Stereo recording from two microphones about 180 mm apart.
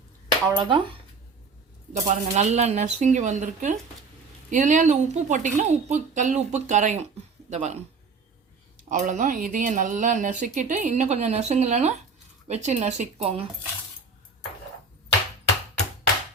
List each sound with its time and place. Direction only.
0.4 s speech: 25° right (ahead or behind)
1.9 s speech: 40° right (ahead or behind)
8.9 s speech: 45° right (ahead or behind)